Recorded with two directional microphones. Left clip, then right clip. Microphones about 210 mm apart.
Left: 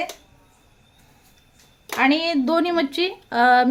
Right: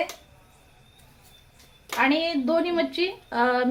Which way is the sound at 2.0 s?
60° left (ahead or behind).